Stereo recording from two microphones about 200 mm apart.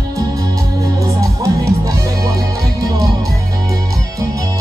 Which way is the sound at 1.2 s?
15° right (ahead or behind).